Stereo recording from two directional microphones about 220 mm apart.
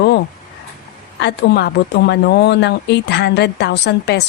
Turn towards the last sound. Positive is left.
turn(degrees=50)  # may be behind; listen again after turning